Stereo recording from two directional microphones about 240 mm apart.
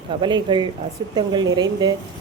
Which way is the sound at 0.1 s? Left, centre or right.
Centre.